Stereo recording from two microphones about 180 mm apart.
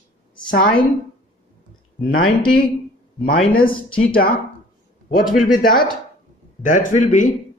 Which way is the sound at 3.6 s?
30° left (ahead or behind).